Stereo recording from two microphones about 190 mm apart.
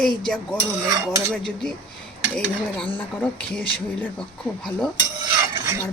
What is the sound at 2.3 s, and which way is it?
Speech, 5° left (ahead or behind).